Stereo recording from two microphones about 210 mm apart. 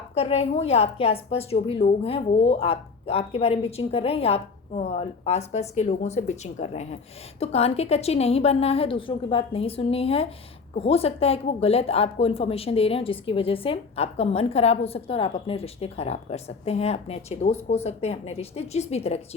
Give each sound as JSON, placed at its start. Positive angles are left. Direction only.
{"t": 0.1, "sound": "a woman's voice", "side_deg": 30}